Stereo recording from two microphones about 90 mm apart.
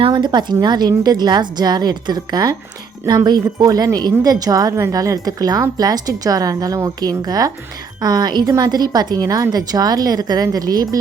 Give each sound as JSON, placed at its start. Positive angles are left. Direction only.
{"t": 0.1, "sound": "a woman's voice", "side_deg": -55}